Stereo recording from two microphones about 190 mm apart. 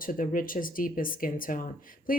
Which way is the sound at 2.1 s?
45° left (ahead or behind).